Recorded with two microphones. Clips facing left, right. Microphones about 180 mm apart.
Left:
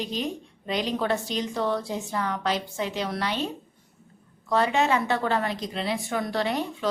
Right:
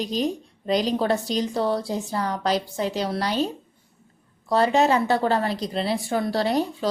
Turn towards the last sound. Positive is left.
turn(degrees=-35)  # may be behind; listen again after turning